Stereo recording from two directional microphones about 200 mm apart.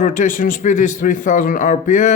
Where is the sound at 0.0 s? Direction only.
40° left (ahead or behind).